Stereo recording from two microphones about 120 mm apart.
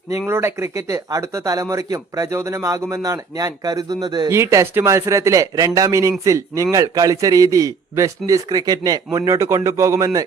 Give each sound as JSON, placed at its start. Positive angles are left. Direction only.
{"t": 0.3, "sound": "speech", "side_deg": -20}
{"t": 4.3, "sound": "speech", "side_deg": -20}